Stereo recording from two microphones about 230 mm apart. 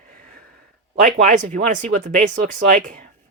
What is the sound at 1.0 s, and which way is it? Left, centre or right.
Speech, right.